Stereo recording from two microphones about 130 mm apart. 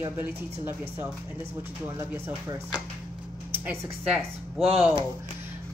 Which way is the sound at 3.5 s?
10° right (ahead or behind).